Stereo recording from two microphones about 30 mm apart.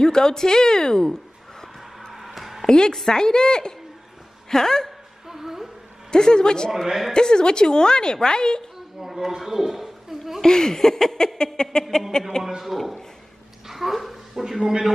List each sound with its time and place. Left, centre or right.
0.0 s a woman's voice: left
2.1 s a sound: centre
2.6 s a woman's voice: left
5.3 s music: centre
6.1 s a woman's voice: left
8.7 s a sound: centre
10.4 s a woman's voice: left
12.4 s a man's voice: centre
12.7 s a man's voice: centre
13.7 s a sound: centre
14.4 s a man's voice: centre